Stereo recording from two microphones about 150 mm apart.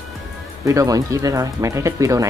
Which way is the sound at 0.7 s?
20° right (ahead or behind).